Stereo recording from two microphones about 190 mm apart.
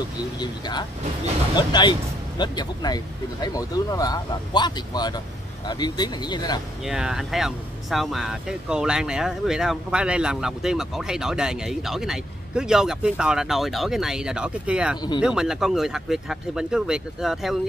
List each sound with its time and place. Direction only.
0.4 s speech: 20° left (ahead or behind)
6.8 s speech: 5° right (ahead or behind)